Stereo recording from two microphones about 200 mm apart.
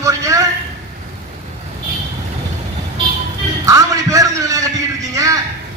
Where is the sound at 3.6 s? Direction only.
15° right (ahead or behind).